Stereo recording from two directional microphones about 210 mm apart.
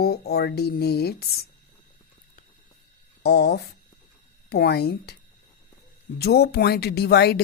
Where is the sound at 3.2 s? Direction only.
50° left (ahead or behind).